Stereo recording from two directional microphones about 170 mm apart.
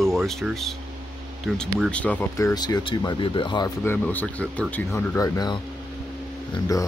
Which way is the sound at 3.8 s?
10° left (ahead or behind).